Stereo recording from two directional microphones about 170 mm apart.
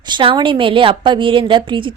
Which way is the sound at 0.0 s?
30° right (ahead or behind).